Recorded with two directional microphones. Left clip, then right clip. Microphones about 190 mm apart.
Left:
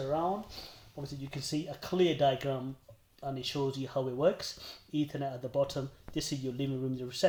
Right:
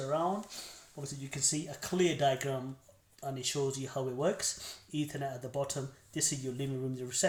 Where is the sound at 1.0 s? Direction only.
40° left (ahead or behind).